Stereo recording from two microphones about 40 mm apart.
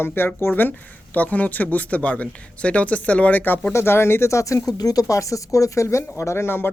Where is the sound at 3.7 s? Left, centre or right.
Left.